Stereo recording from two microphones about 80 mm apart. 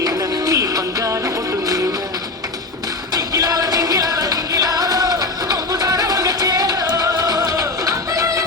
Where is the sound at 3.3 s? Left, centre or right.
Right.